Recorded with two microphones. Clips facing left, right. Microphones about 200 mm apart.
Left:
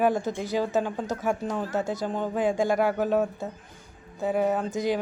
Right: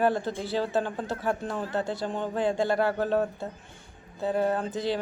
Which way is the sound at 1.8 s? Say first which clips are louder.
Left 2 dB; 45° left (ahead or behind).